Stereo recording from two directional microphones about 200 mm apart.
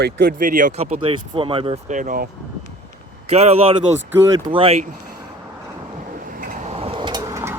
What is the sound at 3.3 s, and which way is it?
Speech, 30° right (ahead or behind).